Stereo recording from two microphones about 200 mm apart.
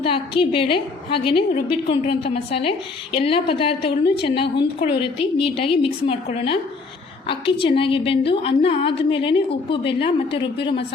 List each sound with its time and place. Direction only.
0.0 s a woman's voice: 25° left (ahead or behind)